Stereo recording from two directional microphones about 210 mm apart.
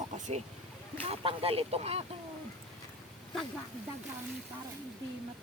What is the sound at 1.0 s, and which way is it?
Speech, 25° right (ahead or behind).